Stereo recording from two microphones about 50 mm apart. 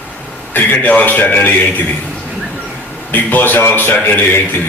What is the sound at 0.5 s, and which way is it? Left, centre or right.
A man's voice, left.